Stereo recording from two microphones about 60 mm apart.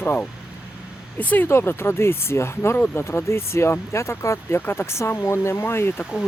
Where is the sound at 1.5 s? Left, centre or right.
Left.